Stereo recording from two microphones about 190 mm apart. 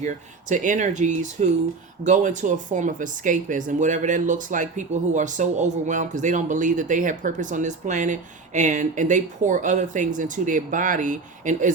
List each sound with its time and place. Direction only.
0.0 s speech: 40° right (ahead or behind)